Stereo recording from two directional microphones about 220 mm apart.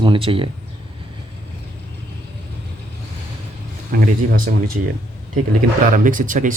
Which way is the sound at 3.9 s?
40° right (ahead or behind).